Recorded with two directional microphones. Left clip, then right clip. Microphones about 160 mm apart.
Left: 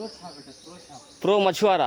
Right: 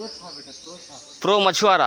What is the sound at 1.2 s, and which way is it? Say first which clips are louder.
Speech: right 3 dB; 20° left (ahead or behind).